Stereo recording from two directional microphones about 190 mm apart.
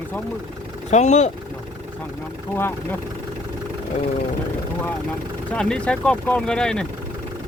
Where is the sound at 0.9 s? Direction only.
35° left (ahead or behind).